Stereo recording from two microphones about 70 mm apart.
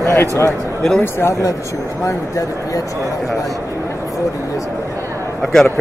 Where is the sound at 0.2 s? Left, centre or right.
Left.